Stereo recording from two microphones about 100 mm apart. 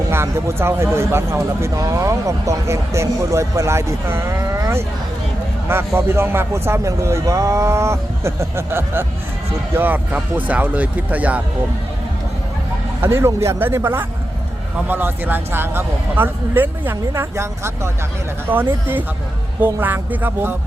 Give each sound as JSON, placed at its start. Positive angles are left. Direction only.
{"t": 0.1, "sound": "speech", "side_deg": -25}
{"t": 13.0, "sound": "speech", "side_deg": -25}